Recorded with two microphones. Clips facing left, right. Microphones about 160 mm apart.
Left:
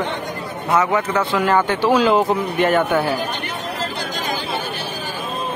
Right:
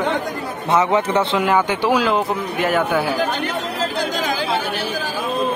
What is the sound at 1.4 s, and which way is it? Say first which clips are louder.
Speech: even; 15° right (ahead or behind).